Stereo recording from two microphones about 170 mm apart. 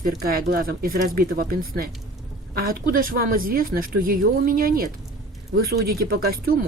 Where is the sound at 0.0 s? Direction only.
60° right (ahead or behind).